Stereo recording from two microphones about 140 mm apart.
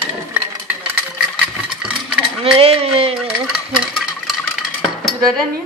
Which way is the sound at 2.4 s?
45° right (ahead or behind).